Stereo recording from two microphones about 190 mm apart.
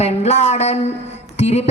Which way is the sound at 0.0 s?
35° left (ahead or behind).